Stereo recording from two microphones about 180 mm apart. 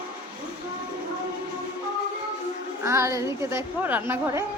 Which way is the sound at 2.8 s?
15° right (ahead or behind).